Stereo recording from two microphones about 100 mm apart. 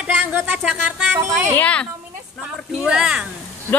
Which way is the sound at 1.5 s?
10° left (ahead or behind).